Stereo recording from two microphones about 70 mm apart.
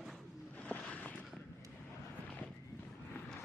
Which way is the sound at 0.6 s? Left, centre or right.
Centre.